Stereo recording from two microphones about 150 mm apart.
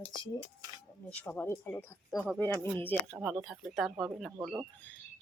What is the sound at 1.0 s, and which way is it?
Speech, 10° left (ahead or behind).